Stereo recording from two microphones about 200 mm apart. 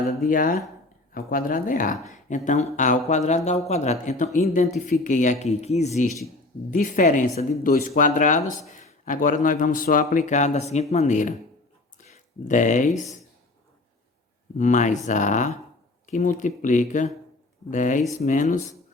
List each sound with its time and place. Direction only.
0.2 s speech: 45° left (ahead or behind)
11.9 s a sound: 40° left (ahead or behind)
14.6 s speech: 40° left (ahead or behind)